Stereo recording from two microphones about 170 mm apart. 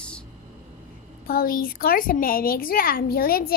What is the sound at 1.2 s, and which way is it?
A woman's voice, 60° left (ahead or behind).